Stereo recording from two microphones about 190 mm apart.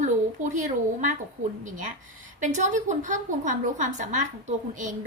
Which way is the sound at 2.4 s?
40° right (ahead or behind).